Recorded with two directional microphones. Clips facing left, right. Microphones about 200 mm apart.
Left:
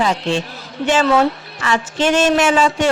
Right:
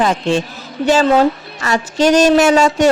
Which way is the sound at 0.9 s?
35° right (ahead or behind).